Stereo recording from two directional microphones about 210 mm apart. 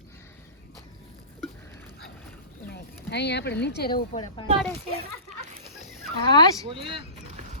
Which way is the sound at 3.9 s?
25° left (ahead or behind).